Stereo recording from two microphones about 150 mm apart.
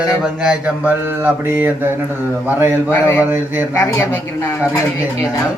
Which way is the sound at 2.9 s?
15° left (ahead or behind).